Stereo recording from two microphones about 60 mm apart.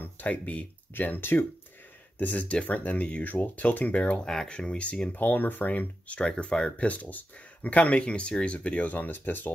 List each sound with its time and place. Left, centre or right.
0.0 s speech: left
5.1 s speech: left
6.9 s speech: left